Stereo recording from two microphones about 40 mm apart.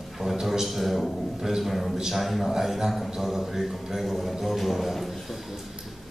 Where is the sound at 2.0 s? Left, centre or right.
Centre.